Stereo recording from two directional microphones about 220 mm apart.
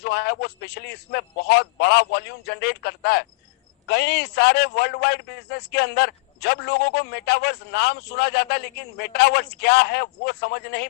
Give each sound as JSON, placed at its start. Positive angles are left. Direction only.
{"t": 0.0, "sound": "a man's voice", "side_deg": 45}